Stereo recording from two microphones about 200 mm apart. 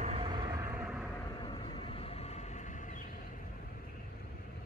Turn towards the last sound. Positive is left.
turn(degrees=40)  # may be behind; listen again after turning